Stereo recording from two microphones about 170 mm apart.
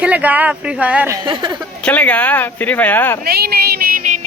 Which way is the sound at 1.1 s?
25° right (ahead or behind).